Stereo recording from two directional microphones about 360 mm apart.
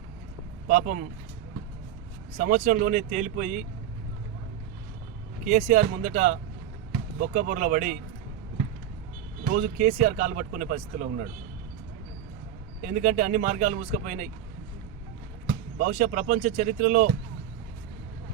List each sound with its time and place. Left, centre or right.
0.7 s speech: right
2.4 s speech: right
5.5 s speech: right
9.5 s speech: right
12.8 s speech: right
15.8 s speech: right